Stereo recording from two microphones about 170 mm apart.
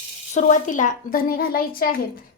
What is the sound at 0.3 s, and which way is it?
A woman's voice, 45° left (ahead or behind).